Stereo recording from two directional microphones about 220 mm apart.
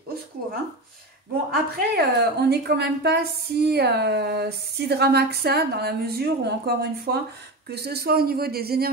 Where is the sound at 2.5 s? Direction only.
45° right (ahead or behind).